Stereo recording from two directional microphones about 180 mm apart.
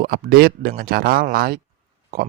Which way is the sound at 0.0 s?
55° right (ahead or behind).